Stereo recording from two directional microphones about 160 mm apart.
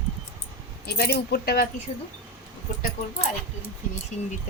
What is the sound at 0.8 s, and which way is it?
Speech, 85° left.